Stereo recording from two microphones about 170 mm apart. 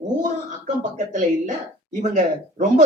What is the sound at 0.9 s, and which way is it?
Speech, 45° right (ahead or behind).